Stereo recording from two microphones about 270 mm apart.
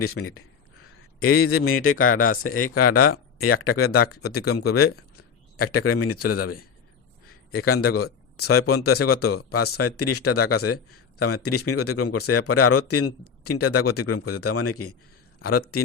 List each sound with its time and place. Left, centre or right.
0.0 s speech: left